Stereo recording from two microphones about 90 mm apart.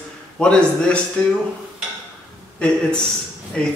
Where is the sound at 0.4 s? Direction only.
10° left (ahead or behind).